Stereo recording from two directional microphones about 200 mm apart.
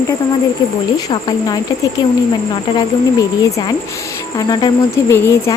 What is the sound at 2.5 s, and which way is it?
Speech, 20° left (ahead or behind).